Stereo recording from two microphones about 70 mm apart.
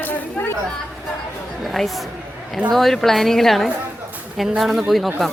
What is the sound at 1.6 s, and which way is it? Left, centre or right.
A woman's voice, centre.